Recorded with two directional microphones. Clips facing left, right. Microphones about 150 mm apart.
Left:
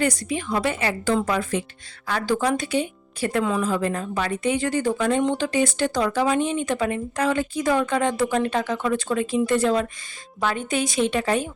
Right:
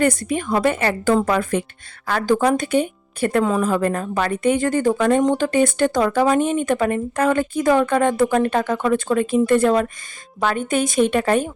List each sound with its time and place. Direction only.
0.0 s speech: 55° right (ahead or behind)